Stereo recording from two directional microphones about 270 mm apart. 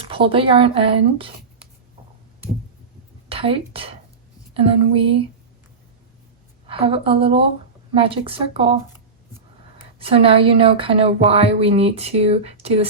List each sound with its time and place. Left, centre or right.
0.0 s speech: centre
3.2 s speech: centre
6.7 s speech: centre
10.0 s speech: right